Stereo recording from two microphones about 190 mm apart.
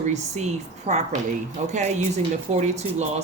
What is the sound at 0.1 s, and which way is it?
Speech, 35° right (ahead or behind).